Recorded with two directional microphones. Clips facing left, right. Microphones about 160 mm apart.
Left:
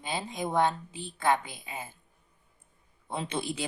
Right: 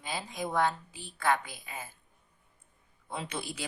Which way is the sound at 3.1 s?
25° left (ahead or behind).